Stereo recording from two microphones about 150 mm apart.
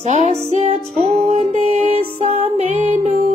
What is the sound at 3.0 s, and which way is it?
Music, 45° right (ahead or behind).